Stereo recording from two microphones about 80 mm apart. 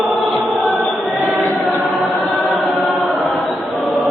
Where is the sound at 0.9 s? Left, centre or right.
Centre.